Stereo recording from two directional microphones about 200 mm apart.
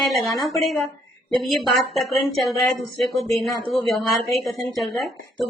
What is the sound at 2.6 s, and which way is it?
Speech, centre (ahead or behind).